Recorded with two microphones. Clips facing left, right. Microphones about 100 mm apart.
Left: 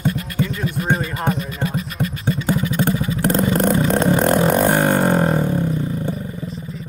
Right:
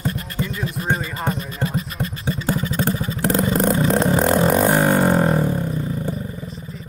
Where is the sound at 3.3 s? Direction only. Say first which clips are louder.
Left 1 dB; 5° right (ahead or behind).